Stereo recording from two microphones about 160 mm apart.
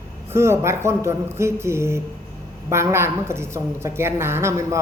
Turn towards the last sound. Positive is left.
turn(degrees=-15)  # may be behind; listen again after turning